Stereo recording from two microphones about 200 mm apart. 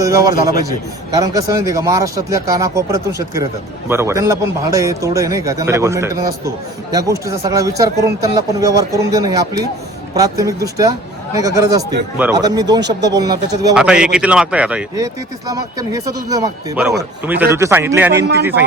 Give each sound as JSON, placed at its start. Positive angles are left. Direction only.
{"t": 0.0, "sound": "a man's voice", "side_deg": -15}
{"t": 12.4, "sound": "speech", "side_deg": -20}
{"t": 13.7, "sound": "a man's voice", "side_deg": -5}
{"t": 14.9, "sound": "a man's voice", "side_deg": -20}